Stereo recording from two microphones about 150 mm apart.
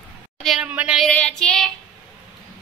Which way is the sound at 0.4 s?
5° right (ahead or behind).